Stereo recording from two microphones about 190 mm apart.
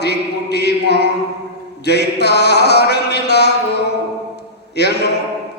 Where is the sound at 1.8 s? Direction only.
60° left (ahead or behind).